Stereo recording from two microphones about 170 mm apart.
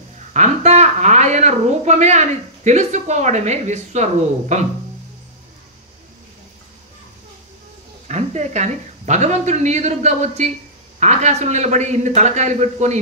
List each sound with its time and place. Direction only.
0.3 s a woman's voice: 45° right (ahead or behind)
8.1 s speech: 40° right (ahead or behind)